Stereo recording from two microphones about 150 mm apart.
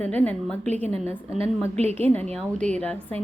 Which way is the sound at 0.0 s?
10° left (ahead or behind).